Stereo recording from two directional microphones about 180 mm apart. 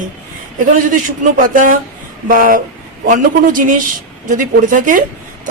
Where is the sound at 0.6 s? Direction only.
45° right (ahead or behind).